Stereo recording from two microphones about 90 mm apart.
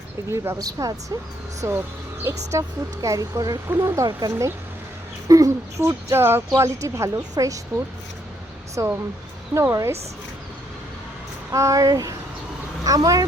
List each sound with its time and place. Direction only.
0.3 s speech: 30° right (ahead or behind)
0.6 s speech: 45° right (ahead or behind)
1.6 s speech: 30° right (ahead or behind)
8.8 s speech: 35° right (ahead or behind)
11.5 s speech: 35° right (ahead or behind)